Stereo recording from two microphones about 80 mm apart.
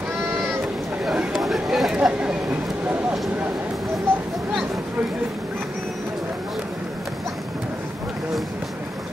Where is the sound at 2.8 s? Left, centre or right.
Centre.